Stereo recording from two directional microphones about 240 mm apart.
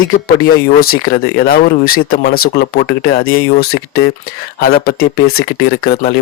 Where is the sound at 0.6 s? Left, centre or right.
Left.